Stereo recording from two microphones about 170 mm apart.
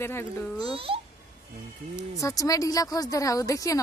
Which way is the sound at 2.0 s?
20° left (ahead or behind).